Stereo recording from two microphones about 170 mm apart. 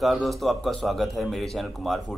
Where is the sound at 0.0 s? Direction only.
Centre (ahead or behind).